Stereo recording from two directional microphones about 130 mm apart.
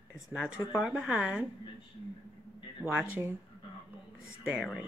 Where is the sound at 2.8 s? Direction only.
5° right (ahead or behind).